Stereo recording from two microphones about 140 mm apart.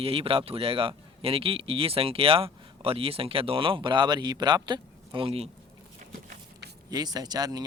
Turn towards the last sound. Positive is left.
turn(degrees=-25)  # may be behind; listen again after turning